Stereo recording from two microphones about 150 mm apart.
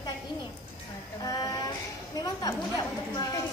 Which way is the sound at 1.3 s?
25° left (ahead or behind).